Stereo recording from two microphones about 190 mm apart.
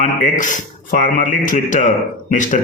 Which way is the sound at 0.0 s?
40° left (ahead or behind).